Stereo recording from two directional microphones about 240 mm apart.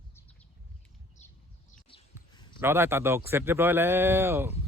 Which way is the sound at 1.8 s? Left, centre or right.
Left.